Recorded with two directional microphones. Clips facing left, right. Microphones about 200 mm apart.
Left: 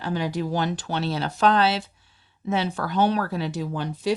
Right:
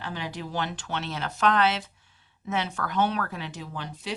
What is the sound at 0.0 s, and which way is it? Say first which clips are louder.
Speech: left 8 dB; 40° left (ahead or behind).